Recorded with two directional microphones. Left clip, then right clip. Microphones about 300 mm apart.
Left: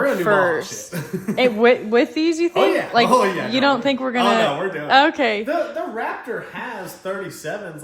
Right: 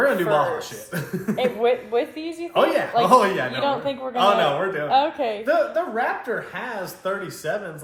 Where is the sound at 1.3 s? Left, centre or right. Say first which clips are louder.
Left 6 dB; left.